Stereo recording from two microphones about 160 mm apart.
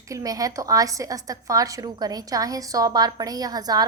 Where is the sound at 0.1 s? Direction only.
20° right (ahead or behind).